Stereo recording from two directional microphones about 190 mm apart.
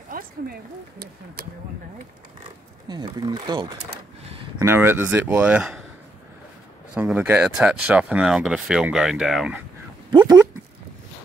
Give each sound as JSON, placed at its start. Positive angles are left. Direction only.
{"t": 0.1, "sound": "speech", "side_deg": -55}
{"t": 2.9, "sound": "speech", "side_deg": -20}
{"t": 7.0, "sound": "speech", "side_deg": -10}
{"t": 10.1, "sound": "speech", "side_deg": -20}